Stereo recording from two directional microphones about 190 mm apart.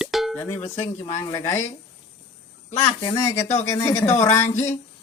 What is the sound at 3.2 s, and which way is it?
Speech, 15° left (ahead or behind).